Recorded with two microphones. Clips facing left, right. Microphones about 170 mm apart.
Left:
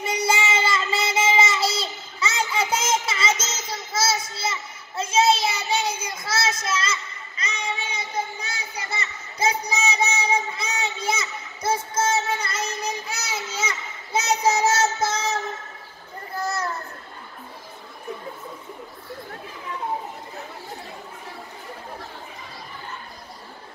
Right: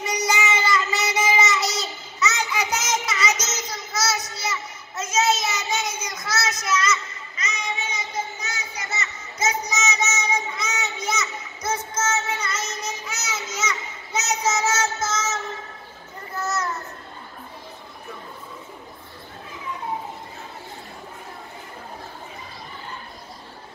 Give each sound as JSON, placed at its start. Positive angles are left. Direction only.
{"t": 0.0, "sound": "child singing", "side_deg": 30}
{"t": 16.3, "sound": "children playing", "side_deg": 30}